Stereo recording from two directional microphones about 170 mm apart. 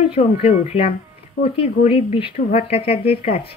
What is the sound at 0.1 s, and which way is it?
Speech, 35° left (ahead or behind).